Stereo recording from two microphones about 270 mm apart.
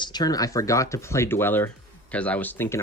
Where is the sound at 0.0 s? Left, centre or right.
Centre.